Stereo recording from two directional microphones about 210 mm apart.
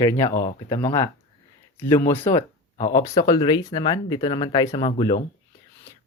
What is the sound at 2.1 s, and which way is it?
Speech, 25° left (ahead or behind).